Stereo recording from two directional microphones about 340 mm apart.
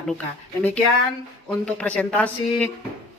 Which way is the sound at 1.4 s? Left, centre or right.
Centre.